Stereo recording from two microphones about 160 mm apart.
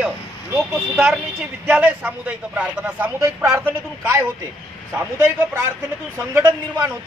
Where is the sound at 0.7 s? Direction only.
5° right (ahead or behind).